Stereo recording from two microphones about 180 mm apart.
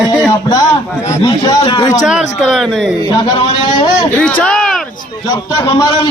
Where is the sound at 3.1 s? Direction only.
25° left (ahead or behind).